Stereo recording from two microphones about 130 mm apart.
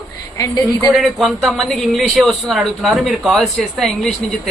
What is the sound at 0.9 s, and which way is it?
A man's voice, centre (ahead or behind).